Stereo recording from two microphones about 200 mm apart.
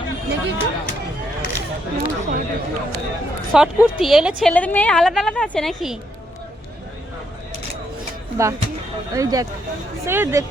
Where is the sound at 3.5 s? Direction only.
5° right (ahead or behind).